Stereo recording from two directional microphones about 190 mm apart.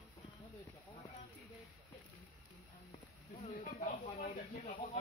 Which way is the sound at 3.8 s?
40° left (ahead or behind).